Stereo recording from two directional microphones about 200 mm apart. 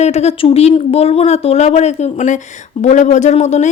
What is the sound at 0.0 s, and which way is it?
Speech, 35° left (ahead or behind).